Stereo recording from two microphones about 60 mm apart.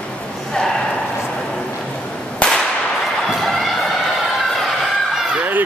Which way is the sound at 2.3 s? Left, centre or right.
Centre.